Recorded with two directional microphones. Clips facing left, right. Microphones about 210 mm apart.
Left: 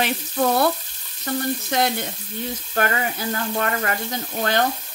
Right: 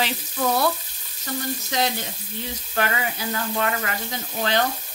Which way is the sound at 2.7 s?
45° left (ahead or behind).